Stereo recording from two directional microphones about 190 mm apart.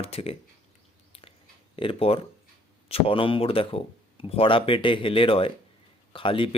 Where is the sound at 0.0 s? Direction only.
30° left (ahead or behind).